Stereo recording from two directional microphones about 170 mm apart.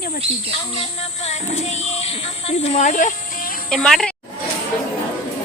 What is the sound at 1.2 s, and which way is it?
Speech, 40° left (ahead or behind).